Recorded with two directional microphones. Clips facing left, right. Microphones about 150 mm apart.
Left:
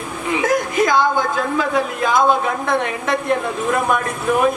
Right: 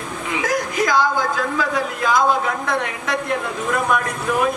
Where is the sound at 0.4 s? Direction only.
25° left (ahead or behind).